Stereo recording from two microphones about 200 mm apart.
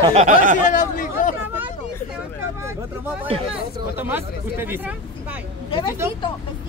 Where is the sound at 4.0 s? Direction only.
10° right (ahead or behind).